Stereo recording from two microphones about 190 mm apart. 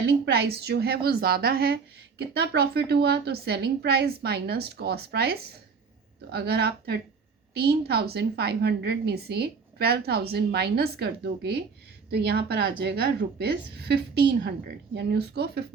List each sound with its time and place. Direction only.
0.3 s a woman's voice: 55° right (ahead or behind)